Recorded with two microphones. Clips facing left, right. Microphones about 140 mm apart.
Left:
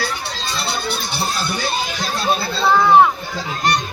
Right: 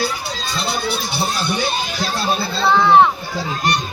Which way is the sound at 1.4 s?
Centre (ahead or behind).